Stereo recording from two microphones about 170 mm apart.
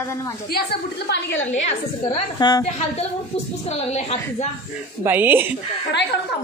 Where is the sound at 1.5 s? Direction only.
40° left (ahead or behind).